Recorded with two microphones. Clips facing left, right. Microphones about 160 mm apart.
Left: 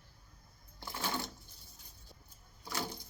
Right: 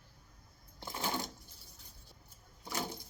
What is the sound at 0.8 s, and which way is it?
Sewing machine, 20° right (ahead or behind).